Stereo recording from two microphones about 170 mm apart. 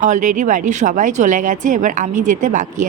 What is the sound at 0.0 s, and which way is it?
Speech, 45° right (ahead or behind).